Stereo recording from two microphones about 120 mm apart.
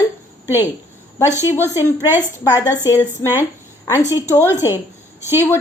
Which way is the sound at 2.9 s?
20° left (ahead or behind).